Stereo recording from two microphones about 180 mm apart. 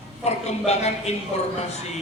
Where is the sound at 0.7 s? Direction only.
40° left (ahead or behind).